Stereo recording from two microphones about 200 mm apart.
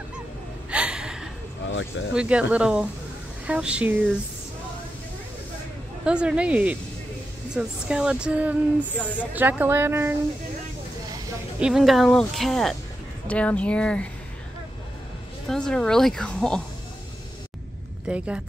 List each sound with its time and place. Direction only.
0.7 s gasp: 5° right (ahead or behind)
1.7 s speech: 70° left (ahead or behind)
2.1 s speech: 5° right (ahead or behind)
6.0 s speech: 5° right (ahead or behind)
11.6 s speech: centre (ahead or behind)
15.4 s speech: 5° left (ahead or behind)
18.0 s speech: 5° right (ahead or behind)